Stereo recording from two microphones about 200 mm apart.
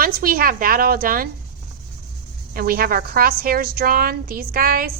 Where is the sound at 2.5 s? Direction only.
45° right (ahead or behind).